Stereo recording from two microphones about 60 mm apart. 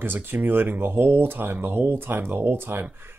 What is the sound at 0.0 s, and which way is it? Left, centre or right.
Speech, right.